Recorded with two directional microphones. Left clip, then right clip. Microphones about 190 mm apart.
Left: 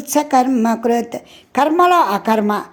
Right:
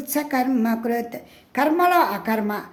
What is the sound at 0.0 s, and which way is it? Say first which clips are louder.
A woman's voice: left 9 dB; 25° left (ahead or behind).